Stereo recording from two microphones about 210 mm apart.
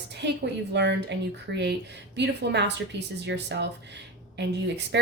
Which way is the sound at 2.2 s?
55° right (ahead or behind).